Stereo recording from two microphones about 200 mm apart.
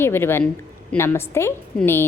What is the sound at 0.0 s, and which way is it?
A woman's voice, 10° left (ahead or behind).